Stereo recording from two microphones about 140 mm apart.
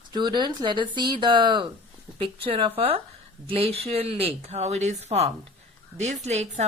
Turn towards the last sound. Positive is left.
turn(degrees=-55)  # may be behind; listen again after turning